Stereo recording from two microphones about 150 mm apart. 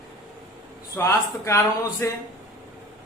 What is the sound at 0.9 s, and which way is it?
A man's voice, 20° left (ahead or behind).